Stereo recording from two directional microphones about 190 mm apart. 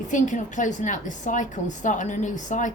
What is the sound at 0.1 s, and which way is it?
A woman's voice, 40° left (ahead or behind).